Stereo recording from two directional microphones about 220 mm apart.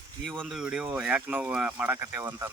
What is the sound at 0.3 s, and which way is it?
Speech, centre (ahead or behind).